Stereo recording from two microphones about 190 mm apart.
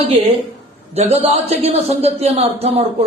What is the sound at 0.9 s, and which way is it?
Speech, 35° right (ahead or behind).